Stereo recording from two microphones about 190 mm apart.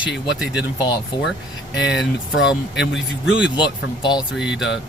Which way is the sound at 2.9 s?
5° right (ahead or behind).